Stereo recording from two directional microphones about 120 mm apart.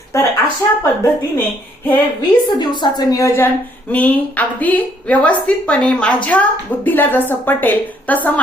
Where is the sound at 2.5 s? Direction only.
40° left (ahead or behind); by 3.5 s 25° left (ahead or behind).